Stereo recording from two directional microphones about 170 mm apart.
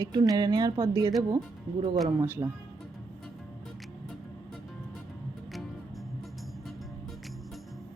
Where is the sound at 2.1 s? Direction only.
15° right (ahead or behind).